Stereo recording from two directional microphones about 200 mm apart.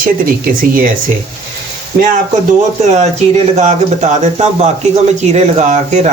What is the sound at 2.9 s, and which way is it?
Speech, 35° right (ahead or behind).